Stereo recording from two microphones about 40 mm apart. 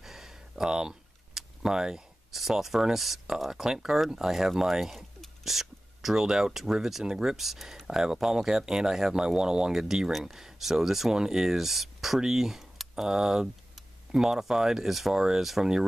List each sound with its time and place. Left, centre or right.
0.0 s a sound: centre
2.3 s speech: centre
15.1 s speech: centre
15.4 s speech: centre